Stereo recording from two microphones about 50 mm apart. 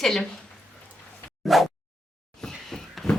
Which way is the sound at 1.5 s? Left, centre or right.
Centre.